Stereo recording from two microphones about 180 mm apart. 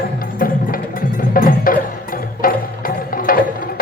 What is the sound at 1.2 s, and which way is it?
Music, 50° left (ahead or behind).